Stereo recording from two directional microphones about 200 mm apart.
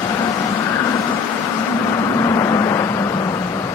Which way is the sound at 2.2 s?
15° left (ahead or behind).